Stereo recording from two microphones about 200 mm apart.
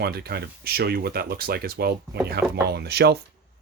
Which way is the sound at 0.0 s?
50° right (ahead or behind).